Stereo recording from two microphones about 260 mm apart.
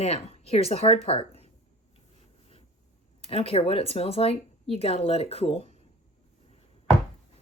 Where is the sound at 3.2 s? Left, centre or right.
Left.